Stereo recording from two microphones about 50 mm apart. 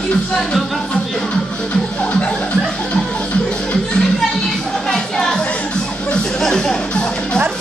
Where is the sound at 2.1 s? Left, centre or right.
Centre.